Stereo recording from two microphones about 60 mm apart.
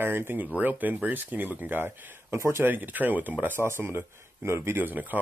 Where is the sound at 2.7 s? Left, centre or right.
Right.